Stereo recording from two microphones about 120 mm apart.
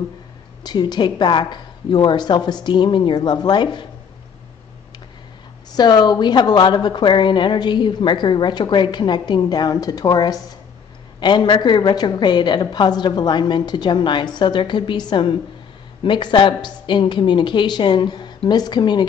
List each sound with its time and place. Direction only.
0.7 s a woman's voice: 35° left (ahead or behind)
5.7 s a woman's voice: 35° left (ahead or behind)